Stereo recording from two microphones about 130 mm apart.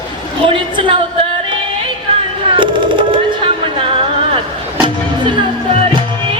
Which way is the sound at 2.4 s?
40° right (ahead or behind).